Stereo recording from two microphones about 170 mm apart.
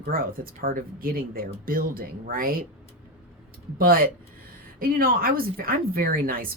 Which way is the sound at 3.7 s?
60° right (ahead or behind).